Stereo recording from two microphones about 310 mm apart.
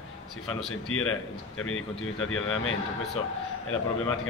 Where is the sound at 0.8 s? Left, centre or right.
Left.